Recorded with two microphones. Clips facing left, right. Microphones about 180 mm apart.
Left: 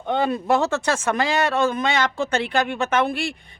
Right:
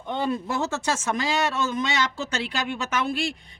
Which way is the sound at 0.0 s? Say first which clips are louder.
Left 4 dB; 65° left (ahead or behind).